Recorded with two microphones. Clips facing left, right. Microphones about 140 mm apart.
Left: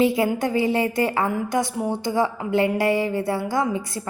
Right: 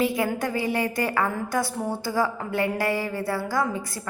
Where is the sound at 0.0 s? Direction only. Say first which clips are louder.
Left 4 dB; 25° left (ahead or behind).